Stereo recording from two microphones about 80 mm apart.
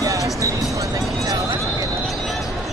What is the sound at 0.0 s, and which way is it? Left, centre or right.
Music, right.